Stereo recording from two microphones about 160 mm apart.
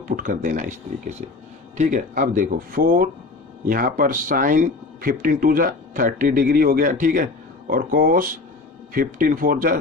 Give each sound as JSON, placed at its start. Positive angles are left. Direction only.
{"t": 0.2, "sound": "speech", "side_deg": -55}